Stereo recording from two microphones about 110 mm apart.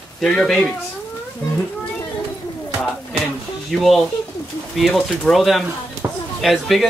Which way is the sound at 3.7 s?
Centre (ahead or behind).